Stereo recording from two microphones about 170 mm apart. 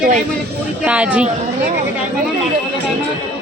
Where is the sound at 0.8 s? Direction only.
10° right (ahead or behind).